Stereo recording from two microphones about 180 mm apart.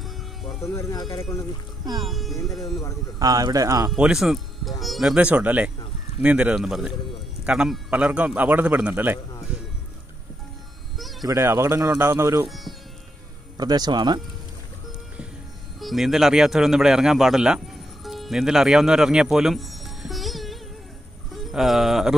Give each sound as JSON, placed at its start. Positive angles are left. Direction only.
{"t": 0.0, "sound": "music", "side_deg": 0}
{"t": 0.7, "sound": "speech", "side_deg": 15}
{"t": 2.0, "sound": "speech", "side_deg": 0}
{"t": 3.2, "sound": "speech", "side_deg": -20}
{"t": 3.9, "sound": "a man's voice", "side_deg": -5}
{"t": 11.0, "sound": "music", "side_deg": 0}
{"t": 11.2, "sound": "a man's voice", "side_deg": -15}
{"t": 12.4, "sound": "speech", "side_deg": 0}
{"t": 13.6, "sound": "speech", "side_deg": -20}
{"t": 15.8, "sound": "speech", "side_deg": 0}
{"t": 18.0, "sound": "music", "side_deg": 0}
{"t": 21.5, "sound": "speech", "side_deg": 0}